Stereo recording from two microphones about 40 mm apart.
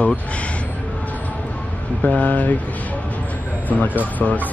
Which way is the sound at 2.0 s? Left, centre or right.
Left.